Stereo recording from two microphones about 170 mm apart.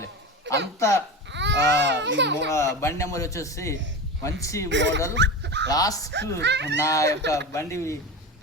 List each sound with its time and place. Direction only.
0.5 s a sound: 90° right
0.8 s a man's voice: 15° left (ahead or behind)
1.3 s baby cry: 90° right
2.5 s a man's voice: 15° left (ahead or behind)
4.7 s a child's voice: 90° right
5.1 s dog: 90° right
5.6 s speech: 20° left (ahead or behind)
6.4 s a child's voice: 90° right
6.7 s a man's voice: 15° left (ahead or behind)